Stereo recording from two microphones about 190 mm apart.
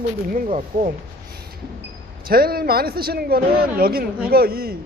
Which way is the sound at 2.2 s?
50° right (ahead or behind).